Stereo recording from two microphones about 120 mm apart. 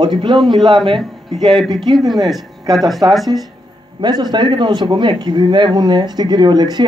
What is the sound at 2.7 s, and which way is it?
Speech, centre (ahead or behind).